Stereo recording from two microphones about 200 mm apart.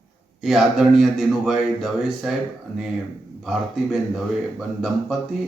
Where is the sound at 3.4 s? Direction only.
Centre (ahead or behind).